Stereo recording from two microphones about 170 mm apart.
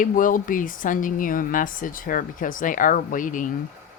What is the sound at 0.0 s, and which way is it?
Speech, 50° left (ahead or behind).